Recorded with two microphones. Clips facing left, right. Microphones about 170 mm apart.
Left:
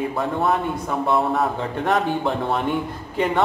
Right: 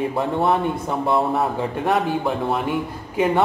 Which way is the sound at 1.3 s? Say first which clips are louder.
Right 1 dB; 5° right (ahead or behind).